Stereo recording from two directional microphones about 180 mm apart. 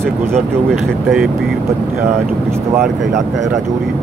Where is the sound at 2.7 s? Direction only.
Centre (ahead or behind).